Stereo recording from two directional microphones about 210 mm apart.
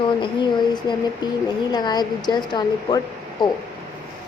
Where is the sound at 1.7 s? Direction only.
20° left (ahead or behind).